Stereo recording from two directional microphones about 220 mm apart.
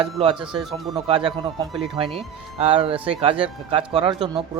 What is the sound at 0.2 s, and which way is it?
A man's voice, 20° right (ahead or behind).